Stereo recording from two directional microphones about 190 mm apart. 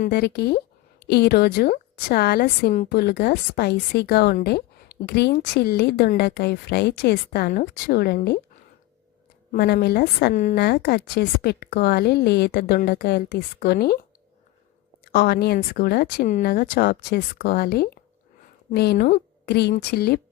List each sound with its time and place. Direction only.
0.1 s a woman's voice: 55° left (ahead or behind)
9.5 s a woman's voice: 55° left (ahead or behind)
15.1 s a woman's voice: 55° left (ahead or behind)